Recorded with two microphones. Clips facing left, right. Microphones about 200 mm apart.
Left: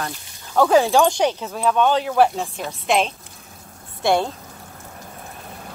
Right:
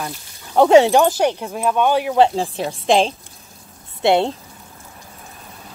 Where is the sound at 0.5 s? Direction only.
25° right (ahead or behind).